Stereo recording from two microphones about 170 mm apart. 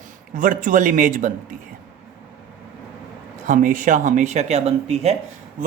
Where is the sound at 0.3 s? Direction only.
50° right (ahead or behind).